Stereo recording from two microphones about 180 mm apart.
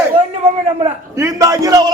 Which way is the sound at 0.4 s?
35° right (ahead or behind).